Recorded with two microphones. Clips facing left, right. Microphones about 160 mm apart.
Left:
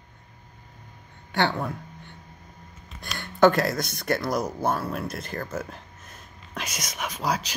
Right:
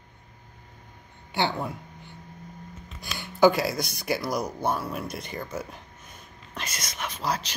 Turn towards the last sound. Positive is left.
turn(degrees=10)  # may be behind; listen again after turning